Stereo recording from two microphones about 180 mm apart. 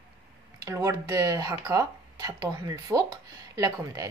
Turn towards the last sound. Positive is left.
turn(degrees=-20)  # may be behind; listen again after turning